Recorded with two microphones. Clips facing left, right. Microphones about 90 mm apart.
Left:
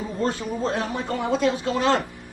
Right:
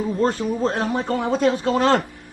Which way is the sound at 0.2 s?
40° right (ahead or behind).